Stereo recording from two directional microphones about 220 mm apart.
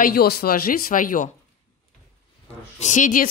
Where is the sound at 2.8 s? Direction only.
35° left (ahead or behind).